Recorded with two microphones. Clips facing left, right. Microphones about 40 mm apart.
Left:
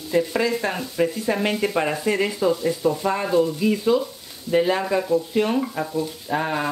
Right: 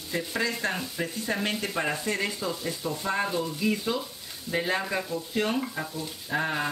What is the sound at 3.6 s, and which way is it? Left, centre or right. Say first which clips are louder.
Frying: left 8 dB; centre.